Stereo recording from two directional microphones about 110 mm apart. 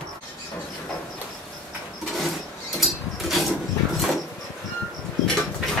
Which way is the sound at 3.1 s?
Centre (ahead or behind).